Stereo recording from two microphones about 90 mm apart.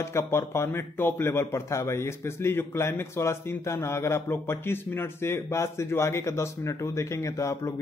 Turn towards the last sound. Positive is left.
turn(degrees=35)  # may be behind; listen again after turning